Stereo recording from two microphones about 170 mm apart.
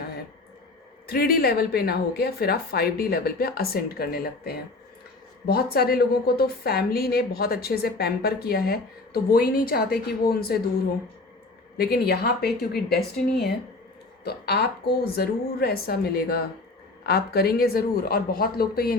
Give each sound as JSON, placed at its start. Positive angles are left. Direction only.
{"t": 1.0, "sound": "a woman's voice", "side_deg": 65}
{"t": 5.7, "sound": "a woman's voice", "side_deg": 65}
{"t": 11.8, "sound": "speech", "side_deg": 65}
{"t": 14.3, "sound": "a woman's voice", "side_deg": 70}